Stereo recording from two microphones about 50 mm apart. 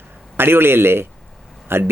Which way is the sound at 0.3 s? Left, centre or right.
Right.